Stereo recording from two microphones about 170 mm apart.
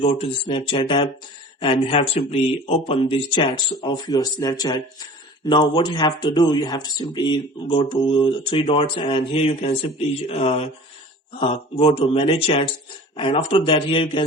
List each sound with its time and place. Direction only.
0.0 s speech: 30° left (ahead or behind)